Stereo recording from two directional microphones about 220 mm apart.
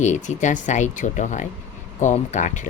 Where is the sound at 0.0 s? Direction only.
35° left (ahead or behind).